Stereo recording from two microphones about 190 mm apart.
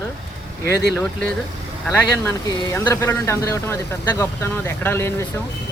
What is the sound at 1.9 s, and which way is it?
Speech, 10° left (ahead or behind).